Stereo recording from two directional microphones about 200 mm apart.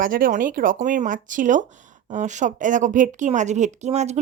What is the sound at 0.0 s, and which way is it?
A woman's voice, 45° right (ahead or behind).